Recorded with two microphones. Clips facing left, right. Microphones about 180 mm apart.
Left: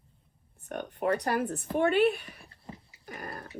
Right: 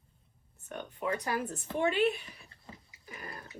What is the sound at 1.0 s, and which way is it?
Speech, 65° left (ahead or behind).